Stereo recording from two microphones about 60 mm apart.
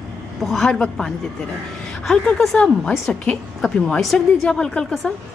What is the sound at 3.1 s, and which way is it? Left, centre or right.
Speech, centre.